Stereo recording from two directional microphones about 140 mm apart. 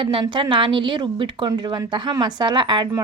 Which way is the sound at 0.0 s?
35° right (ahead or behind).